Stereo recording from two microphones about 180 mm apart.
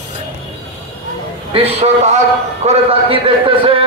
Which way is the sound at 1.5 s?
35° right (ahead or behind).